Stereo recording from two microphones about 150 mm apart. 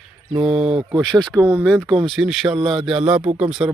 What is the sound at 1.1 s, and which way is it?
Speech, 25° right (ahead or behind).